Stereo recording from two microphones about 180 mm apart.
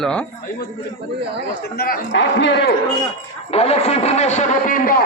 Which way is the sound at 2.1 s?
75° left (ahead or behind).